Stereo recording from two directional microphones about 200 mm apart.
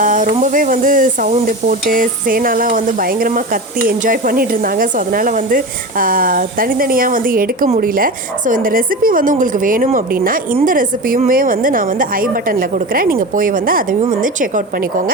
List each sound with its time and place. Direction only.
0.0 s a woman's voice: 40° right (ahead or behind)